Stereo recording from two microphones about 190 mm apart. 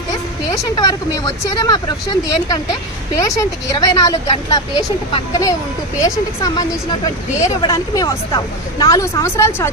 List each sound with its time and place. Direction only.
0.5 s a woman's voice: 15° left (ahead or behind)